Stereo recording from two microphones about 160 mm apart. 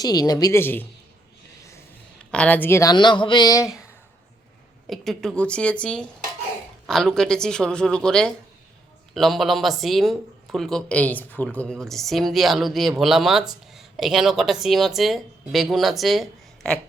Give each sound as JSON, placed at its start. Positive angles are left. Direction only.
{"t": 0.0, "sound": "speech", "side_deg": 25}
{"t": 2.3, "sound": "a woman's voice", "side_deg": 10}
{"t": 2.9, "sound": "speech", "side_deg": 30}
{"t": 4.9, "sound": "a woman's voice", "side_deg": 0}